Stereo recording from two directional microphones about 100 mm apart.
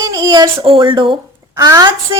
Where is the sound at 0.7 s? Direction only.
55° right (ahead or behind).